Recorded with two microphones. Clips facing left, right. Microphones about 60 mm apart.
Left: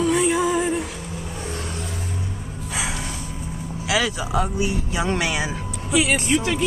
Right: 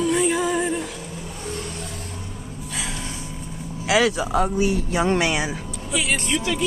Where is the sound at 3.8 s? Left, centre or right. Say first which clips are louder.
Right 4 dB; right.